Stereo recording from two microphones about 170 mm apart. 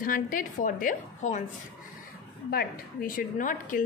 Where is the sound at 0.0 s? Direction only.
55° left (ahead or behind).